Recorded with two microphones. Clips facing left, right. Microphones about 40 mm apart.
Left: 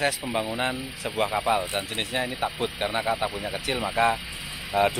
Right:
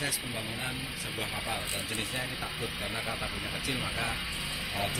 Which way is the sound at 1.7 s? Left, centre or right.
Left.